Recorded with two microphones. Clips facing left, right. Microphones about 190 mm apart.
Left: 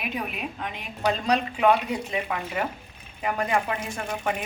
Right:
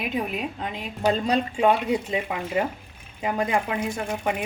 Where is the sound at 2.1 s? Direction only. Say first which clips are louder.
Right 3 dB; 20° right (ahead or behind).